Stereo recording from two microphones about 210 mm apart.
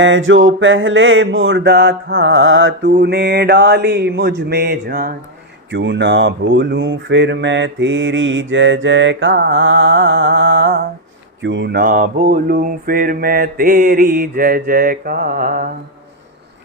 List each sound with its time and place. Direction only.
0.0 s mantra: 65° right (ahead or behind); by 5.1 s 45° right (ahead or behind)
5.7 s mantra: 60° right (ahead or behind); by 15.7 s 40° right (ahead or behind)